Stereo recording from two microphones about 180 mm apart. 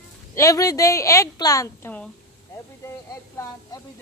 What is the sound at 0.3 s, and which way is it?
Speech, 20° left (ahead or behind).